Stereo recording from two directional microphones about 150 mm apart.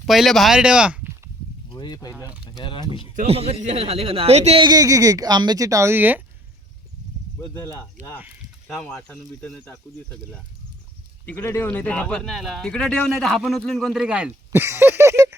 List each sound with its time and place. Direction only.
0.0 s speech: centre (ahead or behind)
1.7 s speech: 30° left (ahead or behind)
3.2 s speech: 40° right (ahead or behind)
4.6 s speech: 25° right (ahead or behind)
7.4 s speech: 20° left (ahead or behind)
8.6 s speech: 5° left (ahead or behind)
11.3 s speech: 15° left (ahead or behind); by 15.4 s 20° right (ahead or behind)